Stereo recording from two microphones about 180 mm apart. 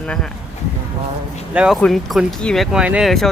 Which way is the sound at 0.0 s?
5° left (ahead or behind).